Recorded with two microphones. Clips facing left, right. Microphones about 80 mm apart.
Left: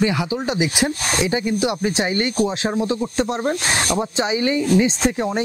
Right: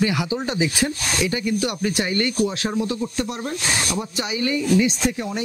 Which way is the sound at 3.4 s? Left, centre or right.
Left.